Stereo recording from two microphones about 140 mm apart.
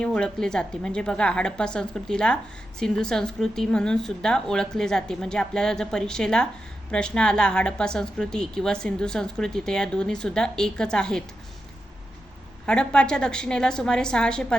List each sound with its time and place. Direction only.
0.0 s a woman's voice: 5° left (ahead or behind)
12.6 s a woman's voice: 5° left (ahead or behind)